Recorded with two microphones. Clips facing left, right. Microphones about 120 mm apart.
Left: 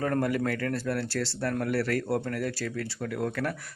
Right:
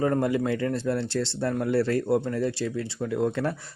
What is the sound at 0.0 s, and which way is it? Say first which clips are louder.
Speech: right 3 dB; 20° right (ahead or behind).